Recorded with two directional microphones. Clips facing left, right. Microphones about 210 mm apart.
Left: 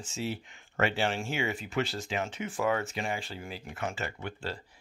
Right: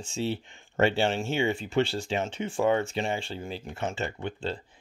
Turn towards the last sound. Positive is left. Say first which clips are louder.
# right 5 dB
turn(degrees=-25)  # may be behind; listen again after turning